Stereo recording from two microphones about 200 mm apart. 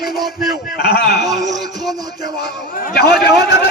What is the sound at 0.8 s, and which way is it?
Speech, 55° left (ahead or behind).